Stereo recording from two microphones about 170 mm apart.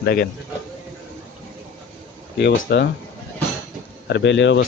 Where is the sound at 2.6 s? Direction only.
70° left (ahead or behind).